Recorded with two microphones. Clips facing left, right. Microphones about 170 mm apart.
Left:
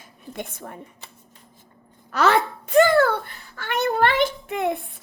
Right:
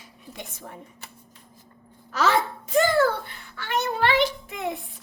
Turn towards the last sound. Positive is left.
turn(degrees=55)  # may be behind; listen again after turning